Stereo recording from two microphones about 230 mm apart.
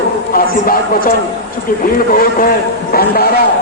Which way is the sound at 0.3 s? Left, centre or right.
Left.